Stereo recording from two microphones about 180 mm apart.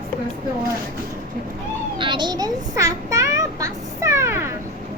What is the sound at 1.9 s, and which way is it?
Children playing, 25° right (ahead or behind).